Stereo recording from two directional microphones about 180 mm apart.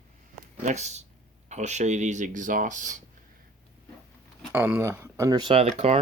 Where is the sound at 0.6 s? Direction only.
40° right (ahead or behind).